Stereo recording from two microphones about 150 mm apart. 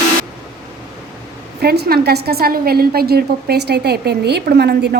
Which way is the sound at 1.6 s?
90° right.